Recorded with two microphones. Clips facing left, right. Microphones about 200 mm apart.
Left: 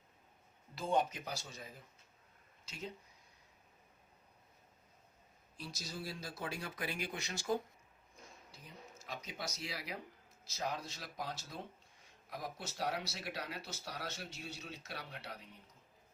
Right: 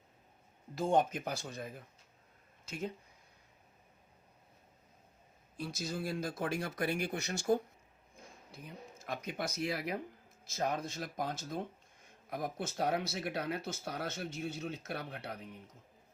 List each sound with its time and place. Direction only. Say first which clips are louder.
0.8 s speech: right 5 dB; 50° right (ahead or behind)
5.5 s speech: right 7 dB; 55° right (ahead or behind)